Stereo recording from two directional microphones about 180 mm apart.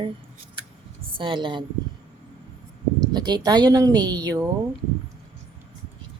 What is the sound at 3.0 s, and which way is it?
Speech, 25° right (ahead or behind).